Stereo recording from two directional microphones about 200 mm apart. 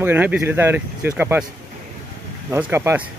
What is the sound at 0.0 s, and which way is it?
Speech, 10° right (ahead or behind).